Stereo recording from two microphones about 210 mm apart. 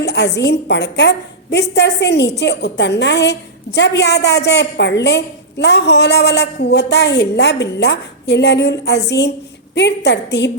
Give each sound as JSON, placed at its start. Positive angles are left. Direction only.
{"t": 0.0, "sound": "a woman's voice", "side_deg": 55}